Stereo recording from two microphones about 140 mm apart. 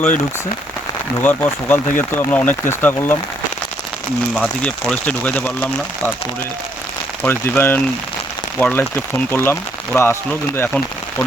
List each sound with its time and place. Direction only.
1.2 s speech: 15° left (ahead or behind)
4.4 s speech: 5° left (ahead or behind)
7.2 s speech: 15° left (ahead or behind)